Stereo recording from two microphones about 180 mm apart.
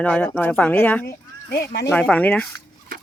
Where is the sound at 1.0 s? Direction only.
60° left (ahead or behind).